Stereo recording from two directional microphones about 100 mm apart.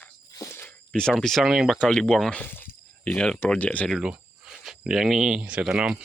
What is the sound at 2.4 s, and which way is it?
Speech, 20° left (ahead or behind).